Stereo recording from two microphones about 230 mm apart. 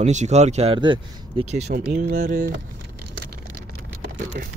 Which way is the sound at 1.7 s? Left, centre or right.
Right.